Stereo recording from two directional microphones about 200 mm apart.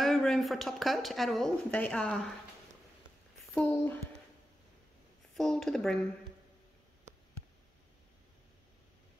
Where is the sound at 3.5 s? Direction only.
10° left (ahead or behind).